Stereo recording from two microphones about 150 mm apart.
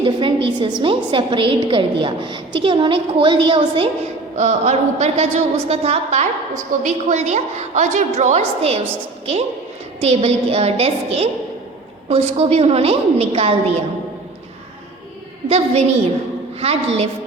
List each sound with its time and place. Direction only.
0.0 s a woman's voice: 35° right (ahead or behind)
4.4 s a woman's voice: 50° right (ahead or behind)
10.0 s a woman's voice: 45° right (ahead or behind)
15.4 s a woman's voice: 45° right (ahead or behind)